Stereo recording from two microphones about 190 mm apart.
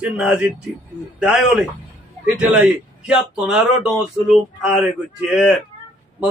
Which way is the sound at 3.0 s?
5° right (ahead or behind).